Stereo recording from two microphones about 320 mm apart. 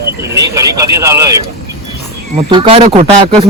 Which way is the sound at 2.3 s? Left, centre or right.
Centre.